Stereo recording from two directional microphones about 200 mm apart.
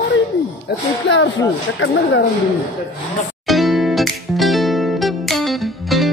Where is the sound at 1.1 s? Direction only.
65° left (ahead or behind).